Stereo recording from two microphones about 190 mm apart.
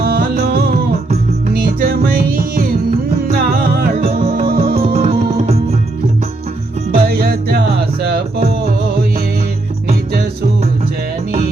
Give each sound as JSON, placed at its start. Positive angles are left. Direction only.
{"t": 0.0, "sound": "music", "side_deg": -55}
{"t": 4.9, "sound": "music", "side_deg": -30}
{"t": 7.0, "sound": "music", "side_deg": -55}